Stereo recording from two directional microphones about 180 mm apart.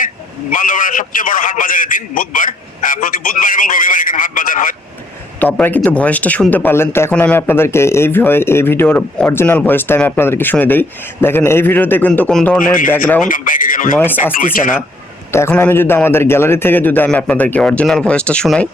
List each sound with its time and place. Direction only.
0.5 s a man's voice: 50° left (ahead or behind)
5.4 s speech: 10° left (ahead or behind)
13.2 s a man's voice: 50° left (ahead or behind)
15.3 s speech: 15° left (ahead or behind)